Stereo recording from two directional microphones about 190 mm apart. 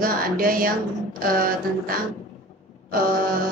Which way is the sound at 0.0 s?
50° right (ahead or behind).